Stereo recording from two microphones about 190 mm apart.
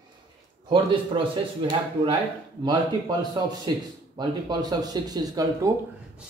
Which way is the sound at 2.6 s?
20° right (ahead or behind).